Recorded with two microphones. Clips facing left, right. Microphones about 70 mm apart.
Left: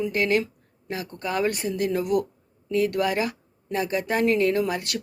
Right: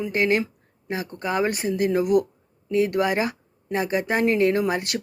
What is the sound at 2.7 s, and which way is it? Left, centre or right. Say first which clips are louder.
A woman's voice: right 2 dB; right.